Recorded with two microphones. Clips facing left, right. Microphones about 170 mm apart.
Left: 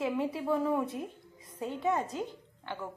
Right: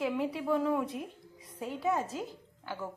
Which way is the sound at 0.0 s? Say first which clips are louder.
Even; centre (ahead or behind).